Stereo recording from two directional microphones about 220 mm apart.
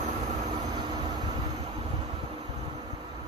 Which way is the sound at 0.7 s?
20° right (ahead or behind).